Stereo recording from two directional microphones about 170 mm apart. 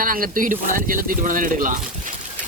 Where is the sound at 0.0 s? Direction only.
55° right (ahead or behind).